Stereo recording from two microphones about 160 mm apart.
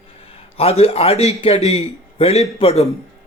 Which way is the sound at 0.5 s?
40° left (ahead or behind).